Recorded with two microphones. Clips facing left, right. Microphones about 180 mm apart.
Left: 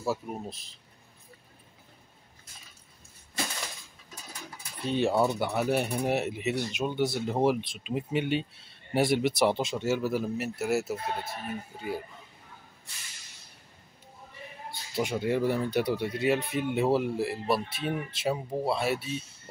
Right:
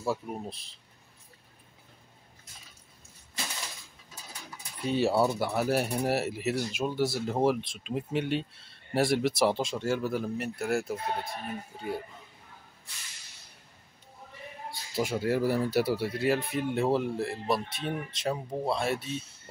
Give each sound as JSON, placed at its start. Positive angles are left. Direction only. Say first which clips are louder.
{"t": 0.0, "sound": "speech", "louder": "even", "side_deg": 0}
{"t": 4.8, "sound": "speech", "louder": "even", "side_deg": -5}
{"t": 14.7, "sound": "speech", "louder": "even", "side_deg": 0}